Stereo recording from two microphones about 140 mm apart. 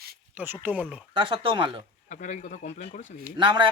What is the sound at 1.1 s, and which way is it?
Speech, 35° right (ahead or behind).